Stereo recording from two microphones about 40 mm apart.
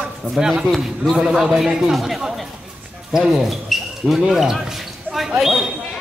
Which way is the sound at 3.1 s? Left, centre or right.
Centre.